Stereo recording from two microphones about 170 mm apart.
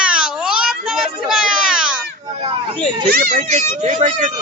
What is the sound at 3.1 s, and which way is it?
A man's voice, 55° right (ahead or behind).